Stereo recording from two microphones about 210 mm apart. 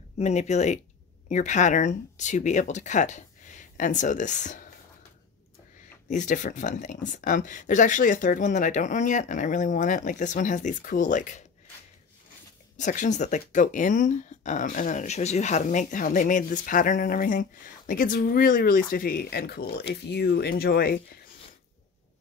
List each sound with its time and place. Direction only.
0.2 s speech: 35° left (ahead or behind)
6.0 s speech: 35° left (ahead or behind)
12.7 s speech: 35° left (ahead or behind)